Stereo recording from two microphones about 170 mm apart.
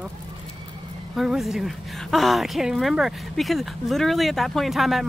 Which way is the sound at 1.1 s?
Centre (ahead or behind).